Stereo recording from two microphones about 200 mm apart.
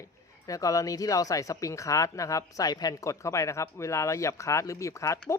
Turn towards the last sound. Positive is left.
turn(degrees=15)  # may be behind; listen again after turning